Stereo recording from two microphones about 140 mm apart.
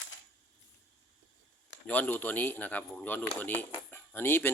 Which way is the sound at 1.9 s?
10° left (ahead or behind).